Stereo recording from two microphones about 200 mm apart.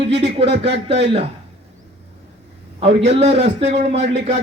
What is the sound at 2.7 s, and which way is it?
A man's voice, 30° right (ahead or behind).